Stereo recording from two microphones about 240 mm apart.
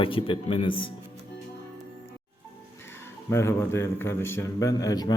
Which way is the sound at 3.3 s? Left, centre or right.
Centre.